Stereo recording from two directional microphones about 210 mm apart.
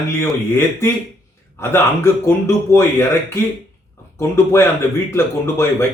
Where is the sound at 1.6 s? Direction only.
10° left (ahead or behind).